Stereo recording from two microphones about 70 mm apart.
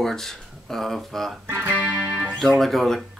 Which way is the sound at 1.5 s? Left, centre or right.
Right.